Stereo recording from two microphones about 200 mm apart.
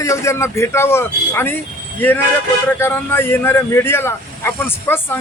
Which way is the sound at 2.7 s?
10° left (ahead or behind).